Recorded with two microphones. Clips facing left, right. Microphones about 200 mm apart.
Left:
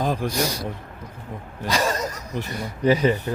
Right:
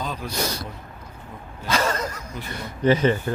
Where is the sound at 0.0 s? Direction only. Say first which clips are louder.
Left 7 dB; 50° left (ahead or behind).